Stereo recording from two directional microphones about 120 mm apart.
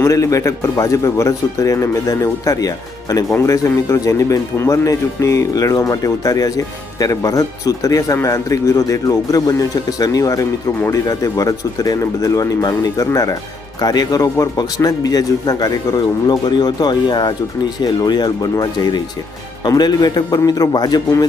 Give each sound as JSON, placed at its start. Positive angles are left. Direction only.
{"t": 0.0, "sound": "a man's voice", "side_deg": 25}